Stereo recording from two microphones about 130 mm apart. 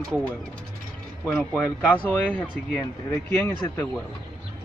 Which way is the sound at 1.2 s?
20° left (ahead or behind).